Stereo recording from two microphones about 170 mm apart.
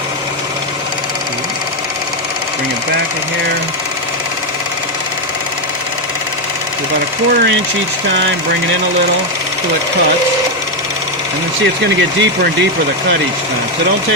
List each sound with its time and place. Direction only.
11.6 s speech: 90° right